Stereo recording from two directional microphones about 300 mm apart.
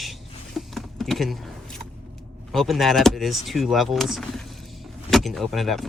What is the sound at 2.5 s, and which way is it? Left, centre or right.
Speech, centre.